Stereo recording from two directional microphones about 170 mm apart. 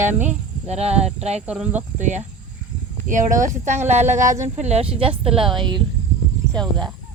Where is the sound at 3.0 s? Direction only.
50° right (ahead or behind); by 5.8 s 30° right (ahead or behind).